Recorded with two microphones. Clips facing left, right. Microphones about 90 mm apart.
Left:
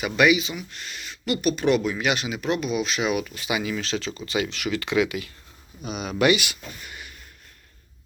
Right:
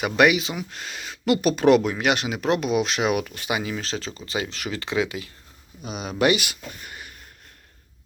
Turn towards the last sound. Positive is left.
turn(degrees=-40)  # may be behind; listen again after turning